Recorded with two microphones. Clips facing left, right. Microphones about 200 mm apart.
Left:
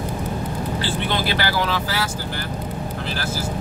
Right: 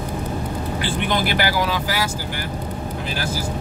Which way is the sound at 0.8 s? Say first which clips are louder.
Right 3 dB; 15° right (ahead or behind).